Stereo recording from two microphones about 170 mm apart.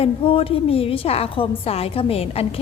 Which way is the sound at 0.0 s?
35° left (ahead or behind).